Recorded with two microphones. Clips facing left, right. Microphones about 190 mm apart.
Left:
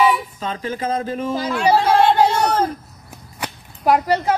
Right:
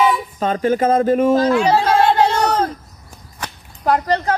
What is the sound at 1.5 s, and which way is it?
Speech, 5° left (ahead or behind).